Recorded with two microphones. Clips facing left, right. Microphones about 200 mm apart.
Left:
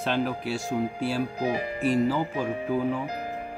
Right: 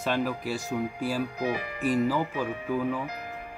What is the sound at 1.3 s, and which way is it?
Speech, 30° left (ahead or behind).